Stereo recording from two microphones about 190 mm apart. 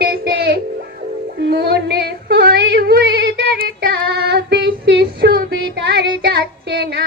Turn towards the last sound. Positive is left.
turn(degrees=-60)  # may be behind; listen again after turning